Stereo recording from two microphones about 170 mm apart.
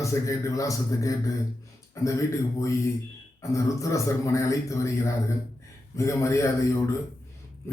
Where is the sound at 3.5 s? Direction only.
20° left (ahead or behind).